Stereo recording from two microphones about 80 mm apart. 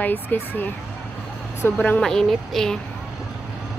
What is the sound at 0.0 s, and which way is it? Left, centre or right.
A woman's voice, left.